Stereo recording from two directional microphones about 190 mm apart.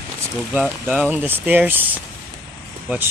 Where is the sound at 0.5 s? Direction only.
5° right (ahead or behind).